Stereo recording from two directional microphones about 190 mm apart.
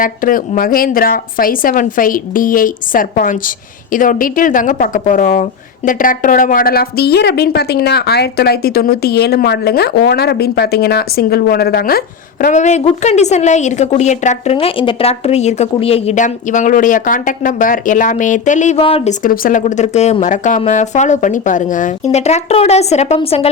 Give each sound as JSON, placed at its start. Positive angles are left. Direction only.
{"t": 0.0, "sound": "a woman's voice", "side_deg": 45}
{"t": 19.2, "sound": "speech", "side_deg": 45}